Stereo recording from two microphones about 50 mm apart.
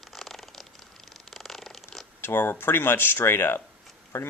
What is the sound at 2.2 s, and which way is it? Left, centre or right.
Speech, left.